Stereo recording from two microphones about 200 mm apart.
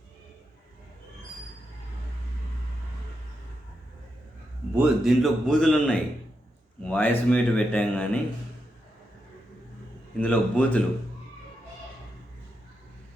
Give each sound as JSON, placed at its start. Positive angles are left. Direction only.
{"t": 4.7, "sound": "a man's voice", "side_deg": -5}
{"t": 10.2, "sound": "speech", "side_deg": 5}